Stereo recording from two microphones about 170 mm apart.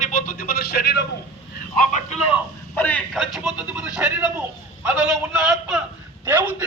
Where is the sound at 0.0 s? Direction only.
50° left (ahead or behind); by 1.0 s 70° left (ahead or behind).